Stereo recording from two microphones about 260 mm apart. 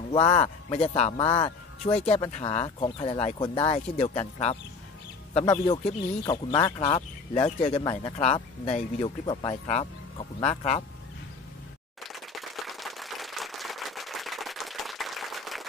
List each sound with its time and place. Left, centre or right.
0.1 s speech: left
5.3 s speech: centre
12.0 s applause: centre